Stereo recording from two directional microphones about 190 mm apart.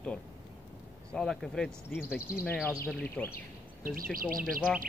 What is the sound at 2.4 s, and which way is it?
Speech, 10° left (ahead or behind).